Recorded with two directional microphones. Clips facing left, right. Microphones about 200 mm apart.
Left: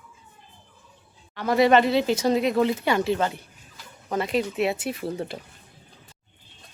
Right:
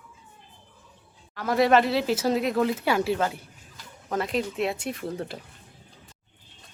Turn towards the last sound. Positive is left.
turn(degrees=0)  # may be behind; listen again after turning